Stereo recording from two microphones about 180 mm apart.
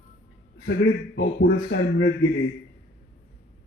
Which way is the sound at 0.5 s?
85° left.